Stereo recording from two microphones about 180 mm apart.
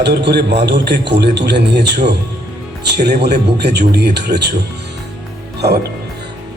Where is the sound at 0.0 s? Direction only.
75° right (ahead or behind).